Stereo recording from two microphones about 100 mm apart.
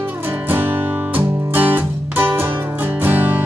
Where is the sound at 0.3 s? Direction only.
20° right (ahead or behind).